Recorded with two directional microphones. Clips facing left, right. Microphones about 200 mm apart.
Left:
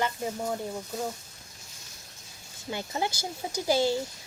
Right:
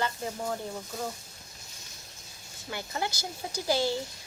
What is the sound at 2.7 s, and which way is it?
Speech, 20° left (ahead or behind).